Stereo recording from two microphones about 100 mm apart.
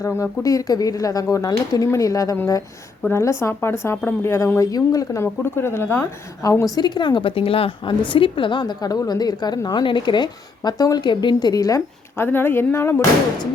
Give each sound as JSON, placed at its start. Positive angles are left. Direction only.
{"t": 0.0, "sound": "speech", "side_deg": 30}
{"t": 6.7, "sound": "a woman's voice", "side_deg": 45}
{"t": 12.1, "sound": "speech", "side_deg": 20}